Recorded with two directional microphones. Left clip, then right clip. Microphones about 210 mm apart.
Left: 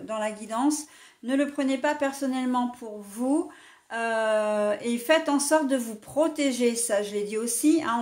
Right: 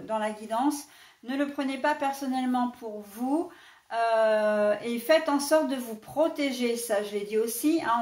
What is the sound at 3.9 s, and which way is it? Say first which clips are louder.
Speech: right 2 dB; 50° left (ahead or behind).